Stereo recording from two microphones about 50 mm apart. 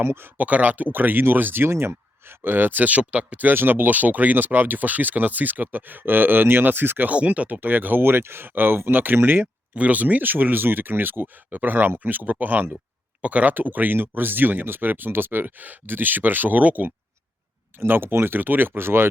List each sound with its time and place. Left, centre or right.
0.0 s speech: right
0.3 s speech: right
0.9 s speech: right
1.7 s speech: right
2.4 s speech: right
7.1 s speech: right
9.7 s speech: right
17.7 s speech: right
18.3 s speech: right